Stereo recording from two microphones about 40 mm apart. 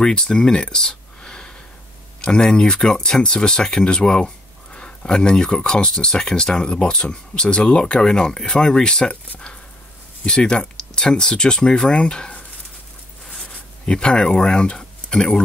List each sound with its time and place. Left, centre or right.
0.0 s speech: centre
10.2 s speech: left
13.8 s speech: left